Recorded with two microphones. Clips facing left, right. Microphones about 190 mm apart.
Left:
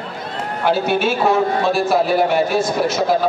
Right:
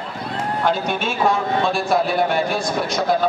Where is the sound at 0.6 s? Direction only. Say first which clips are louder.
Left 5 dB; 5° left (ahead or behind).